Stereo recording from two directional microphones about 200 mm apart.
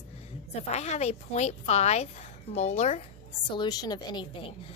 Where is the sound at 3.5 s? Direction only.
20° left (ahead or behind).